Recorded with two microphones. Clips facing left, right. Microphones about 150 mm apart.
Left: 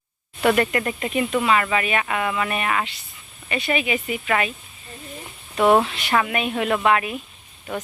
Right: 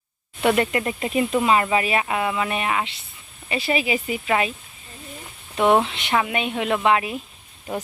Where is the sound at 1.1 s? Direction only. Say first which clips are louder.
Right 1 dB; 30° right (ahead or behind).